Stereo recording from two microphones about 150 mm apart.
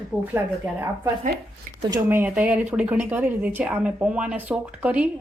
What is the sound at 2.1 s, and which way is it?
A woman's voice, 10° right (ahead or behind).